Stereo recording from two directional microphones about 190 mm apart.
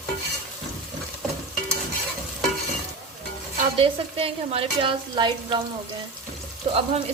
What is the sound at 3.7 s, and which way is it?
Speech, 30° right (ahead or behind).